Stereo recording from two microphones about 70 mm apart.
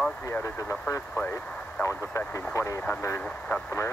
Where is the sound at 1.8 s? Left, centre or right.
Left.